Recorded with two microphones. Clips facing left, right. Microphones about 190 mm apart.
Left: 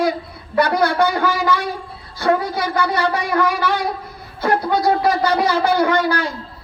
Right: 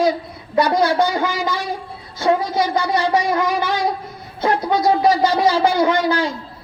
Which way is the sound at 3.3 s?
20° right (ahead or behind).